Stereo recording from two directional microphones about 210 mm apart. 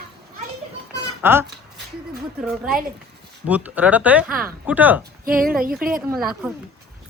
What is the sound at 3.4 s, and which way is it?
A man's voice, 5° right (ahead or behind).